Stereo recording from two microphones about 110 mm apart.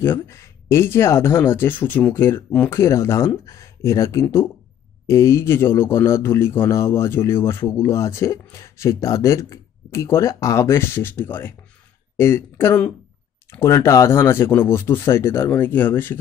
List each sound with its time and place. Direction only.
0.0 s a man's voice: 20° left (ahead or behind)